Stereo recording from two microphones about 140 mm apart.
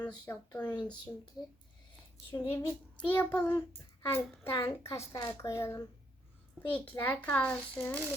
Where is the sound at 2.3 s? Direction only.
25° left (ahead or behind).